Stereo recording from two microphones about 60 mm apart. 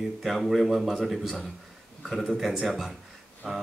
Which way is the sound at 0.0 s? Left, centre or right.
Centre.